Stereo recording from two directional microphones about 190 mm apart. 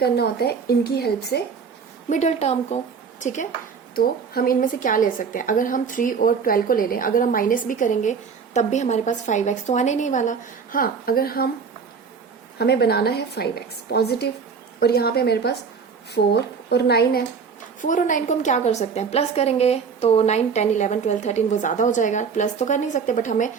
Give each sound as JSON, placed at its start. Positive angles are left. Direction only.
{"t": 0.0, "sound": "a woman's voice", "side_deg": 55}
{"t": 2.0, "sound": "a woman's voice", "side_deg": 35}
{"t": 3.9, "sound": "a woman's voice", "side_deg": 50}
{"t": 12.5, "sound": "a woman's voice", "side_deg": 60}
{"t": 17.7, "sound": "a woman's voice", "side_deg": 40}